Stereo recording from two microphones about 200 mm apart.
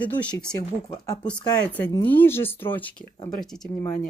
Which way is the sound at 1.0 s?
20° left (ahead or behind).